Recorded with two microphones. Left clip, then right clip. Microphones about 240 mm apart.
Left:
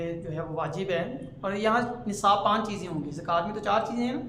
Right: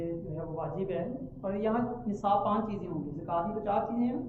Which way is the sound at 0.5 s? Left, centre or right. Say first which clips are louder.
Left 5 dB; left.